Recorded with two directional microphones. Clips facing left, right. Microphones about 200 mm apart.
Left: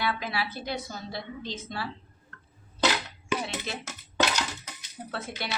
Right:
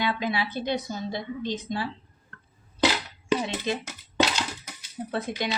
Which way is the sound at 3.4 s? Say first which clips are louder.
Right 6 dB; 15° right (ahead or behind).